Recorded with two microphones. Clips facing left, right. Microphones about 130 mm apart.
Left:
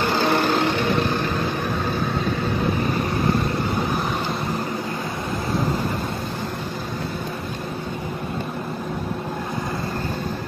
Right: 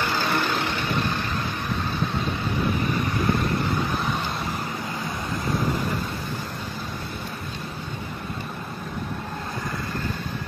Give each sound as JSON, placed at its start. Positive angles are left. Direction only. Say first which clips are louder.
{"t": 0.0, "sound": "vehicle", "louder": "left 5 dB", "side_deg": 50}